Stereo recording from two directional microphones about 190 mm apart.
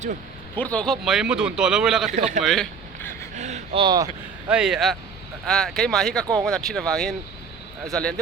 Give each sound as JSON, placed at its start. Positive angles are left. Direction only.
{"t": 0.5, "sound": "a man's voice", "side_deg": 5}
{"t": 2.0, "sound": "a man's voice", "side_deg": -40}
{"t": 2.4, "sound": "a man's voice", "side_deg": 0}
{"t": 3.0, "sound": "a sound", "side_deg": 10}
{"t": 3.3, "sound": "speech", "side_deg": -40}
{"t": 4.4, "sound": "a man's voice", "side_deg": -5}